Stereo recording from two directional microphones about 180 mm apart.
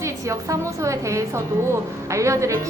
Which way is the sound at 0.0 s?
15° right (ahead or behind).